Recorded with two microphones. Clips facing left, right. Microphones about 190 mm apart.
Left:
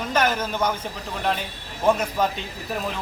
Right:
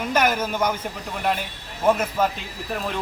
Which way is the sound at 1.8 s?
5° right (ahead or behind).